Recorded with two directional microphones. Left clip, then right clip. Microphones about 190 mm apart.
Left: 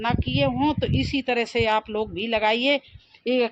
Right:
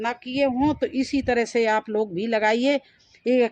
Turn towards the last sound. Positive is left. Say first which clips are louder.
# right 2 dB
turn(degrees=-20)  # may be behind; listen again after turning